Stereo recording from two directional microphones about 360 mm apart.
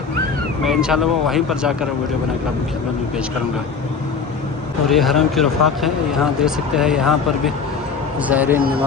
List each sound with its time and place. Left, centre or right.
0.6 s speech: centre
4.9 s speech: centre